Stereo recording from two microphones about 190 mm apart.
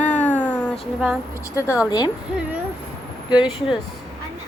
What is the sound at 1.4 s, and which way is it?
Speech, 15° left (ahead or behind).